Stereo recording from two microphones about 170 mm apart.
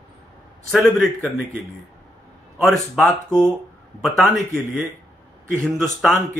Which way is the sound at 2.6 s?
Centre (ahead or behind).